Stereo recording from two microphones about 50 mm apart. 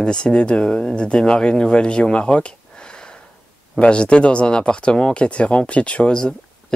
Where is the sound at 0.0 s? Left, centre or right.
Centre.